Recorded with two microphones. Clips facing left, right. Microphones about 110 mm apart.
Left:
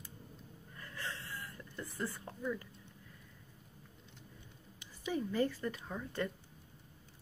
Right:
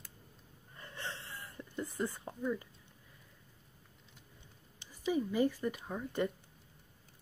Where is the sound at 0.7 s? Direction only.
25° right (ahead or behind).